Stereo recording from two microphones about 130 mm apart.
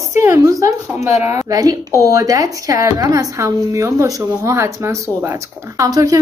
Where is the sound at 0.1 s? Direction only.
20° right (ahead or behind).